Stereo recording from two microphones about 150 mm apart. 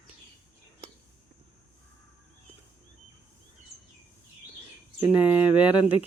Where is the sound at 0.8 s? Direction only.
40° right (ahead or behind).